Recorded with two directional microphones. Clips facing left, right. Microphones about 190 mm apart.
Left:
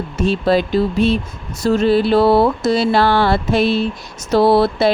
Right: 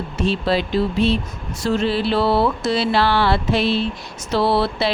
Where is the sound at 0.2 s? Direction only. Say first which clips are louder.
Left 4 dB; 45° left (ahead or behind).